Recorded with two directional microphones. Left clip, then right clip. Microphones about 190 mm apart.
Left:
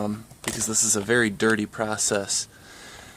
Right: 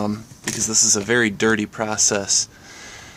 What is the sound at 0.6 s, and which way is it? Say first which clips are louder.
Speech: right 7 dB; 10° left (ahead or behind).